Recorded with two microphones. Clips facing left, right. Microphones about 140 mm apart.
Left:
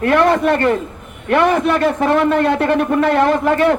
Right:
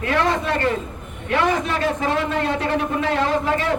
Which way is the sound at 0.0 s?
60° left (ahead or behind).